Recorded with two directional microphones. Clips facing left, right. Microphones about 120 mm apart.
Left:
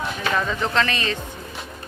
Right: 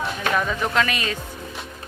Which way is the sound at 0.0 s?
5° right (ahead or behind).